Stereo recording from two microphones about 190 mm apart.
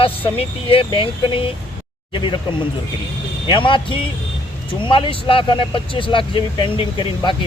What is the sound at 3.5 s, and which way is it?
Speech, 25° left (ahead or behind).